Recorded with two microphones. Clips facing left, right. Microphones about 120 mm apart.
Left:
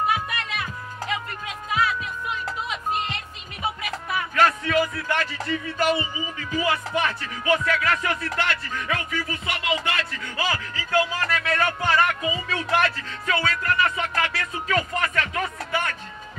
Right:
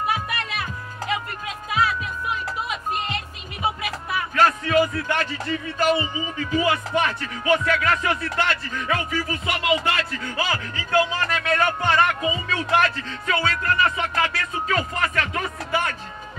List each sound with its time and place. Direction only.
4.1 s music: 35° right (ahead or behind)